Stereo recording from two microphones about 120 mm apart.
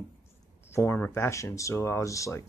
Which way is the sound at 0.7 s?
20° left (ahead or behind).